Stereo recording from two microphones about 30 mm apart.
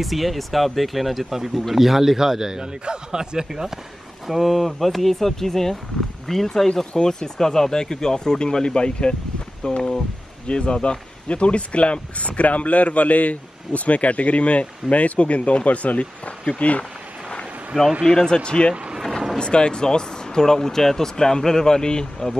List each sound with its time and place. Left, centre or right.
0.0 s a man's voice: centre; by 3.6 s right
4.3 s speech: centre; by 16.8 s left
17.7 s a man's voice: right
18.2 s speech: left